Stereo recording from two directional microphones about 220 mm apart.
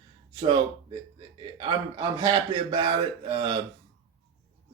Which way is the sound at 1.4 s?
20° right (ahead or behind).